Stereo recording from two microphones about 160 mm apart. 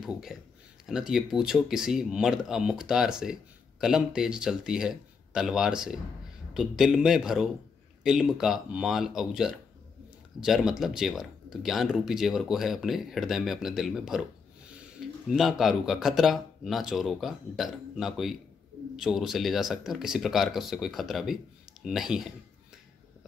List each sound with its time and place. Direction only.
0.0 s speech: centre (ahead or behind)
15.2 s speech: centre (ahead or behind)